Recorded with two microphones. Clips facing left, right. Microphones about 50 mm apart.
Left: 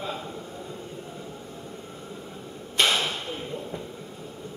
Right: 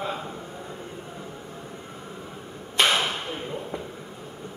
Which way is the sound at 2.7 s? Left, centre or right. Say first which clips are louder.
Right 2 dB; centre.